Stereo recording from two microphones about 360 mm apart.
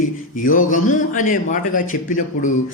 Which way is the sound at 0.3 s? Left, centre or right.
Left.